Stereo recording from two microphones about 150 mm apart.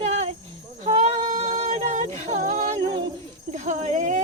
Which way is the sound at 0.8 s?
45° right (ahead or behind).